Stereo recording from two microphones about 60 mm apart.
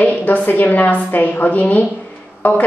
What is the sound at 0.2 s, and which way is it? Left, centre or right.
A woman's voice, left.